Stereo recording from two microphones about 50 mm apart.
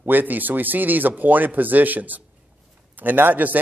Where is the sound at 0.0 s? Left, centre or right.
Right.